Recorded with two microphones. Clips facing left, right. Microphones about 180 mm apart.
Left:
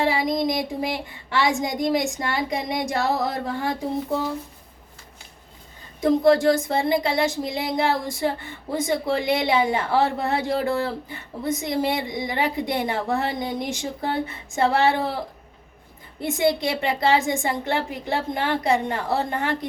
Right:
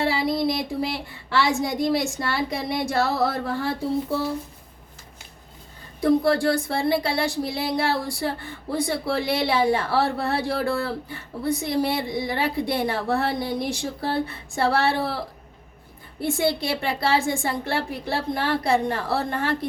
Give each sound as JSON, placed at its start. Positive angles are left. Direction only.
{"t": 0.0, "sound": "a woman's voice", "side_deg": 15}
{"t": 6.0, "sound": "a woman's voice", "side_deg": 20}
{"t": 16.2, "sound": "a woman's voice", "side_deg": 20}